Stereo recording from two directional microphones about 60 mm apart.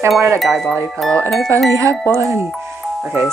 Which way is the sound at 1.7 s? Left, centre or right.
Right.